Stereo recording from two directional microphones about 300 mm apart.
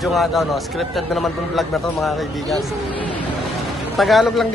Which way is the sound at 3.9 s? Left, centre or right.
Centre.